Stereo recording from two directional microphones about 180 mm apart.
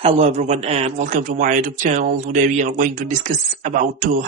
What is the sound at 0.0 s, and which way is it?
A man's voice, 40° right (ahead or behind).